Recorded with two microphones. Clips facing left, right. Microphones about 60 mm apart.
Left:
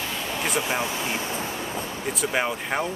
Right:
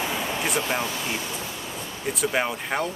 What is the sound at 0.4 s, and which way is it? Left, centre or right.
Speech, centre.